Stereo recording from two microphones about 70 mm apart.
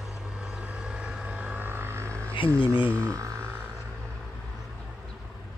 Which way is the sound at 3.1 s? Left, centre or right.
Right.